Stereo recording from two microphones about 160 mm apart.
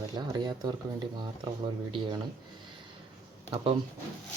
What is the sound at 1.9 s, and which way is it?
Speech, 30° right (ahead or behind).